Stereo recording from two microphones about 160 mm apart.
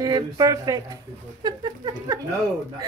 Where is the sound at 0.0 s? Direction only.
20° right (ahead or behind).